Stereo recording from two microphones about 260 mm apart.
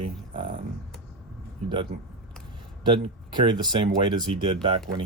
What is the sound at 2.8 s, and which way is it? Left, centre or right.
Speech, centre.